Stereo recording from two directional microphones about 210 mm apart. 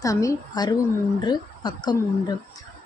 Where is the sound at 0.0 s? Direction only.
15° left (ahead or behind).